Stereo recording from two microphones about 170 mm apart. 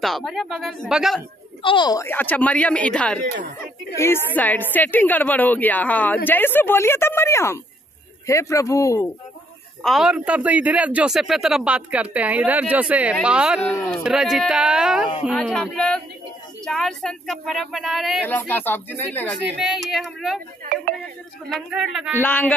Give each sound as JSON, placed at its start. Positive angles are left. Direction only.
{"t": 0.0, "sound": "speech", "side_deg": 0}
{"t": 1.6, "sound": "a woman's voice", "side_deg": 30}
{"t": 9.8, "sound": "a man's voice", "side_deg": -5}
{"t": 13.6, "sound": "a woman's voice", "side_deg": 15}
{"t": 14.0, "sound": "speech", "side_deg": -5}
{"t": 18.2, "sound": "a woman's voice", "side_deg": 10}
{"t": 19.6, "sound": "speech", "side_deg": 0}
{"t": 21.5, "sound": "speech", "side_deg": 0}
{"t": 22.2, "sound": "a woman's voice", "side_deg": 10}